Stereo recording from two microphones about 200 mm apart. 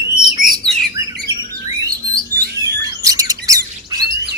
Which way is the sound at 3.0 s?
15° right (ahead or behind).